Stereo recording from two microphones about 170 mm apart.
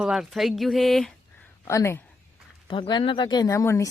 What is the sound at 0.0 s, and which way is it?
Speech, centre (ahead or behind).